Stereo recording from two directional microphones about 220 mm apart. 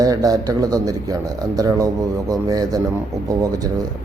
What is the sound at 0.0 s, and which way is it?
A man's voice, 15° right (ahead or behind).